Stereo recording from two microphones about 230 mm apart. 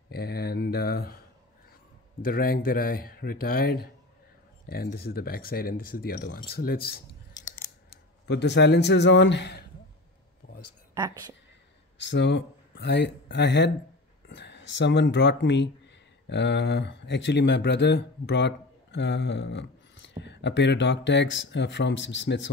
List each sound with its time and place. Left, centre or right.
0.1 s a sound: left
2.2 s speech: left
8.3 s a man's voice: left
11.0 s a woman's voice: centre
12.0 s speech: left